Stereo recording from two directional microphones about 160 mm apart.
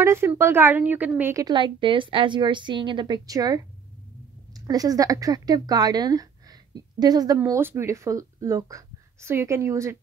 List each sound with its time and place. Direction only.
0.0 s speech: 15° right (ahead or behind)
1.3 s speech: 25° right (ahead or behind)